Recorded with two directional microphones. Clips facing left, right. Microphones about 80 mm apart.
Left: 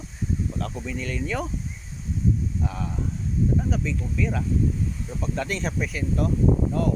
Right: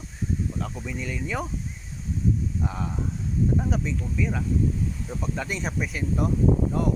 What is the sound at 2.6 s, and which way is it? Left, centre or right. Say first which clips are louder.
Speech: even; right.